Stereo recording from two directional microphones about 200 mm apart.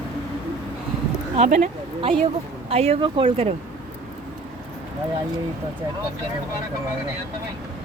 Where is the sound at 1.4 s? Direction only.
40° right (ahead or behind).